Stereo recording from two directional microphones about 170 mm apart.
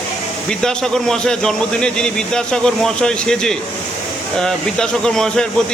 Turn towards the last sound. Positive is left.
turn(degrees=5)  # may be behind; listen again after turning